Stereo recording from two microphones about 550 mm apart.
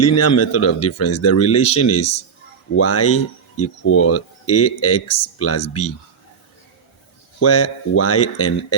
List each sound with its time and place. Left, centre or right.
0.0 s speech: left
7.3 s speech: left